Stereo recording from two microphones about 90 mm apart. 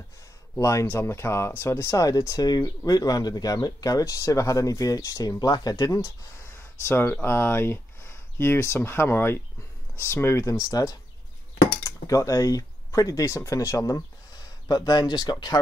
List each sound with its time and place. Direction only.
0.6 s speech: 35° left (ahead or behind); by 15.3 s 50° left (ahead or behind)